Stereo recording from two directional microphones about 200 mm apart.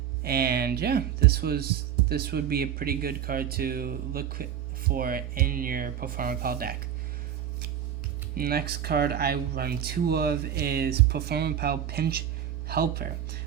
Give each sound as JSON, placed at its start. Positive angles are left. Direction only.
{"t": 0.2, "sound": "speech", "side_deg": -50}
{"t": 8.4, "sound": "speech", "side_deg": -50}